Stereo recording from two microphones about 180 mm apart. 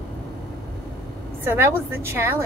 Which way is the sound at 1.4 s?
10° right (ahead or behind).